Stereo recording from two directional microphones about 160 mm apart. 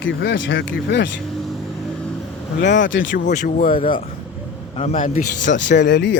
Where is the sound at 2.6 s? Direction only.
90° left.